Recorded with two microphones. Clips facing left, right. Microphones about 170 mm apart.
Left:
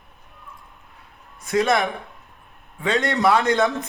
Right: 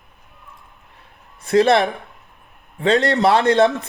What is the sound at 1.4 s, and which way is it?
Speech, 30° right (ahead or behind).